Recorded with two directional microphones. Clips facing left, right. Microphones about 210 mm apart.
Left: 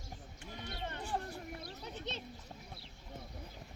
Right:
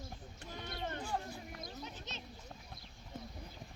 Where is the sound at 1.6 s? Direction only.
35° left (ahead or behind).